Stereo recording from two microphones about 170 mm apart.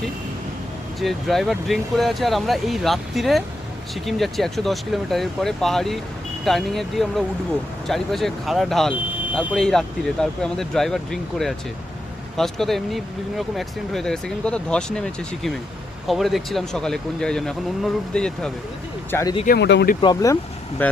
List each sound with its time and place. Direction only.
0.9 s speech: centre (ahead or behind)
9.6 s speech: 5° left (ahead or behind)
19.1 s speech: 20° left (ahead or behind)
19.5 s speech: 85° left
20.0 s speech: 20° left (ahead or behind)